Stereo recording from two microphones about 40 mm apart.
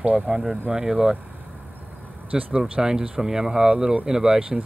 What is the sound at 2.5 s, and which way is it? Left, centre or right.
Speech, right.